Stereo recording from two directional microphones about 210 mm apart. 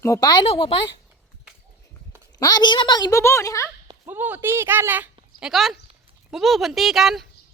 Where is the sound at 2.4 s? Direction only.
20° left (ahead or behind).